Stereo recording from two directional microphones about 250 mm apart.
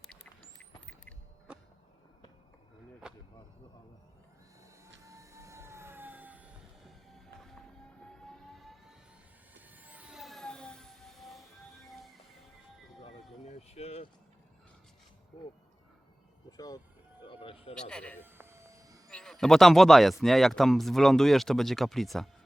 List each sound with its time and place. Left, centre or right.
0.6 s a sound: centre
3.0 s a sound: centre
5.0 s vehicle: centre
8.1 s music: centre
9.6 s vehicle: centre
11.9 s music: centre
13.4 s a sound: left
16.5 s vehicle: centre
17.2 s music: left
17.7 s speech: centre
18.2 s train: centre
19.1 s speech: centre